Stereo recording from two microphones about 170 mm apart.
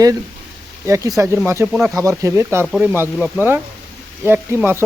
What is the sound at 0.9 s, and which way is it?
Speech, 20° right (ahead or behind).